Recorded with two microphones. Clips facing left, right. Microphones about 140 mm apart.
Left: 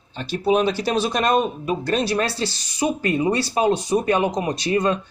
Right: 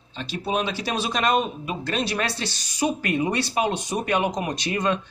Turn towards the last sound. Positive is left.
turn(degrees=35)  # may be behind; listen again after turning